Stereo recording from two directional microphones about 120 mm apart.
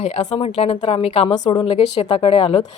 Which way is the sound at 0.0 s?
65° left (ahead or behind).